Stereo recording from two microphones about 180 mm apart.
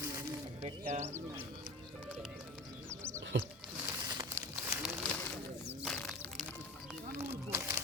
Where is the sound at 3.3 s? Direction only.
90° right.